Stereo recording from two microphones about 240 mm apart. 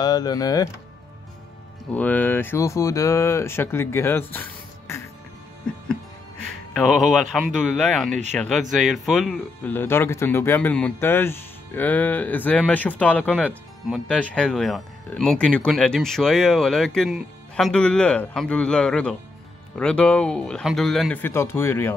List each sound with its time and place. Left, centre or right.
0.0 s speech: centre
2.0 s speech: centre
4.3 s music: centre
6.7 s speech: centre